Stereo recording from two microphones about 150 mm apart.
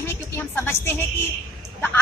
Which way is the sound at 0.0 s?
15° left (ahead or behind).